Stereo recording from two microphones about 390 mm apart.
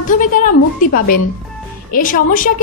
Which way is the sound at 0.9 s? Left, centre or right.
Left.